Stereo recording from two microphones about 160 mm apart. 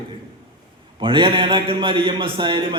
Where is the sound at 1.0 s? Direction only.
30° right (ahead or behind).